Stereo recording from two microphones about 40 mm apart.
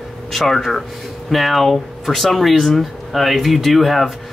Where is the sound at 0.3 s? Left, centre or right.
Centre.